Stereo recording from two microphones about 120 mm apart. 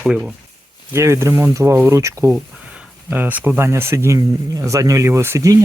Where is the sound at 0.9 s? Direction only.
25° right (ahead or behind).